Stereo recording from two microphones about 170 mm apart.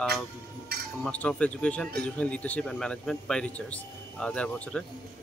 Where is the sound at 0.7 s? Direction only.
65° right (ahead or behind).